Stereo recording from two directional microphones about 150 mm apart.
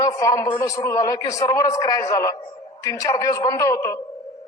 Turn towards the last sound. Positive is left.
turn(degrees=20)  # may be behind; listen again after turning